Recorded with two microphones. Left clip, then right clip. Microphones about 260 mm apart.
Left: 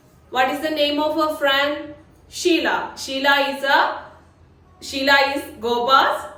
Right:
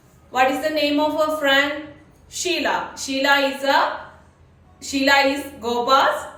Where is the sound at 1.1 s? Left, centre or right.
Centre.